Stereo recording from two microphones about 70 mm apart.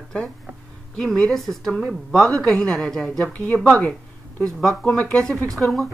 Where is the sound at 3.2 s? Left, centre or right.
Left.